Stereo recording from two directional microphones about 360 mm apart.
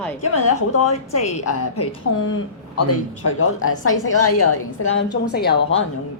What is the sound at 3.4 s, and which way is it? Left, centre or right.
A woman's voice, left.